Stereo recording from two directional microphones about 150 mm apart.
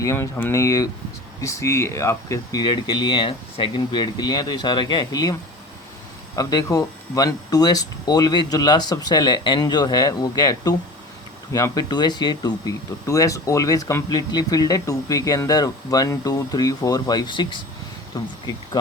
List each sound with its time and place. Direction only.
0.0 s speech: 20° left (ahead or behind)
6.3 s speech: 25° left (ahead or behind)